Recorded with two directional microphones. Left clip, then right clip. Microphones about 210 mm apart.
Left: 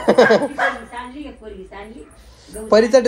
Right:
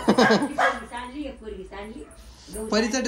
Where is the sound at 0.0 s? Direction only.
20° right (ahead or behind).